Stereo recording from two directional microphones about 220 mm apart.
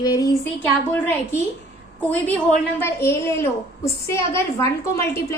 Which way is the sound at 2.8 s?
10° left (ahead or behind).